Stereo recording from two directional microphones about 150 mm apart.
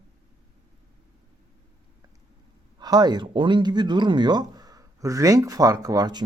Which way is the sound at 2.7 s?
25° right (ahead or behind).